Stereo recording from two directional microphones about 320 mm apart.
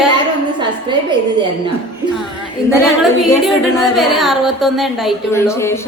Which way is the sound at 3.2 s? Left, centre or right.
Centre.